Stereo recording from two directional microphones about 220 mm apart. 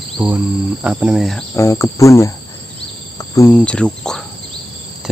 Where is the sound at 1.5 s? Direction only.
15° left (ahead or behind).